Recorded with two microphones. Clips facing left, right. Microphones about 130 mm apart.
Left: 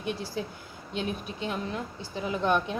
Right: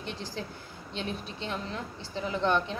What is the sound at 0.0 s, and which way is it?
A woman's voice, 10° left (ahead or behind).